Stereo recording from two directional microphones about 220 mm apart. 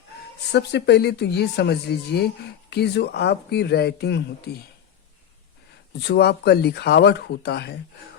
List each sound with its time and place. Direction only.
0.5 s speech: 50° left (ahead or behind)
6.0 s speech: 50° left (ahead or behind)